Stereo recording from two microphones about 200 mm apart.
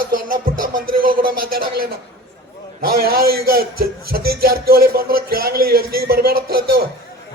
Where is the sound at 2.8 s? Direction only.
50° right (ahead or behind).